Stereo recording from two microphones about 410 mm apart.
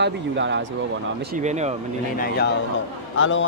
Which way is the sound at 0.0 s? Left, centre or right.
Right.